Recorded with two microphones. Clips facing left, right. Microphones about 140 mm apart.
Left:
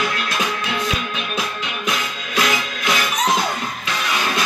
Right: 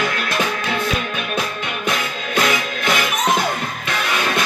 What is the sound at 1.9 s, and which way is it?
Music, 50° right (ahead or behind).